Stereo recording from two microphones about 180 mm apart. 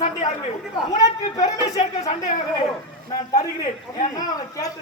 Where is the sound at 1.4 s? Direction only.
20° left (ahead or behind).